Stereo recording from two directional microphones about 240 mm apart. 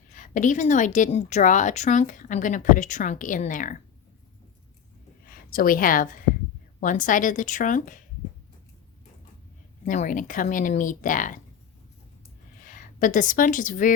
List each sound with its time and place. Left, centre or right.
0.1 s a woman's voice: left
5.5 s a woman's voice: left
9.8 s a woman's voice: left
12.6 s a woman's voice: left